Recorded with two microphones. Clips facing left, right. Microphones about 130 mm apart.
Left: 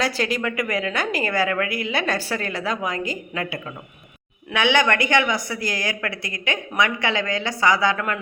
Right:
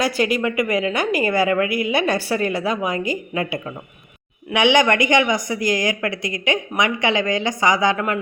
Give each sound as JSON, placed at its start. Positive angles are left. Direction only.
{"t": 0.0, "sound": "speech", "side_deg": -10}